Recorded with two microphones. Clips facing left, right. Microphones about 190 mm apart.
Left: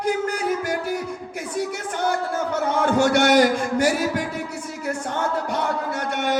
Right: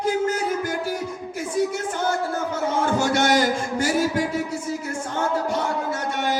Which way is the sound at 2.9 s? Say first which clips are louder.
Left 5 dB; 60° left (ahead or behind).